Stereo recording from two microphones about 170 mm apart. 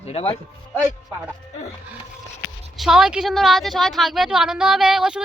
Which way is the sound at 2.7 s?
5° right (ahead or behind).